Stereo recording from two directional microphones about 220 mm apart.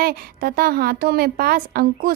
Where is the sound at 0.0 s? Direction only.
40° right (ahead or behind).